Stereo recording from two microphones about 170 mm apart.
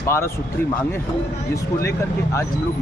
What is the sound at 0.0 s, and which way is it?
Speech, 15° left (ahead or behind).